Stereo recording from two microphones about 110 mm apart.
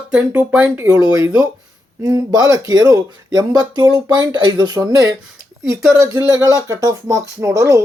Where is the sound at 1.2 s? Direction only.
35° right (ahead or behind).